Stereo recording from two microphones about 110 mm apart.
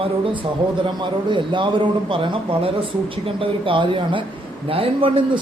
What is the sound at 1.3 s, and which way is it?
Speech, 50° right (ahead or behind).